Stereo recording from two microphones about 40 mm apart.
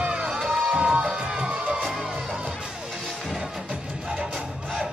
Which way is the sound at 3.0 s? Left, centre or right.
Centre.